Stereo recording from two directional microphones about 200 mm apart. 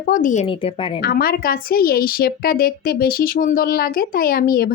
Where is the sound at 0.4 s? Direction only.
25° left (ahead or behind).